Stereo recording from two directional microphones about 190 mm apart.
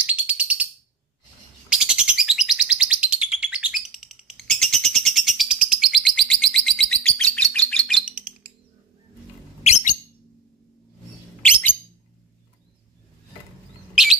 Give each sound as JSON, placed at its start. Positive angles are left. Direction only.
{"t": 0.0, "sound": "bird", "side_deg": -10}
{"t": 1.7, "sound": "bird", "side_deg": -5}
{"t": 9.6, "sound": "bird", "side_deg": 35}
{"t": 14.0, "sound": "bird", "side_deg": 0}